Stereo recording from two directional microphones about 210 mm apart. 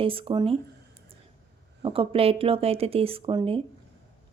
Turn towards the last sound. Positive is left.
turn(degrees=-25)  # may be behind; listen again after turning